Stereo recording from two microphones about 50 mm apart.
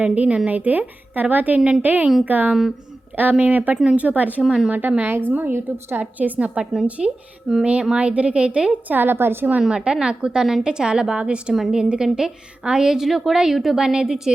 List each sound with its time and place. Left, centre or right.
0.0 s a woman's voice: right
4.4 s a woman's voice: centre
4.7 s a woman's voice: right
5.3 s a woman's voice: right
6.1 s a woman's voice: right
8.9 s a woman's voice: right
9.6 s a woman's voice: centre